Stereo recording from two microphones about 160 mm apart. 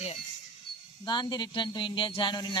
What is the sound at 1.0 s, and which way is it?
Speech, 30° left (ahead or behind).